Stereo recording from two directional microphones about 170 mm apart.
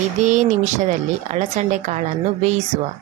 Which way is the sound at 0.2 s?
45° right (ahead or behind).